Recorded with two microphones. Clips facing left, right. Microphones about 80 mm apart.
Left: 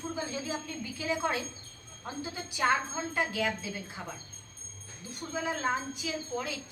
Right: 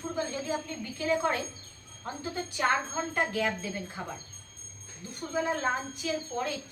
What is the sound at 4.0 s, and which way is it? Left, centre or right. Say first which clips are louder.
Speech: right 3 dB; centre.